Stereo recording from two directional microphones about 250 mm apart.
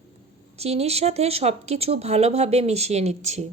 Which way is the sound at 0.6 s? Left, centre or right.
Right.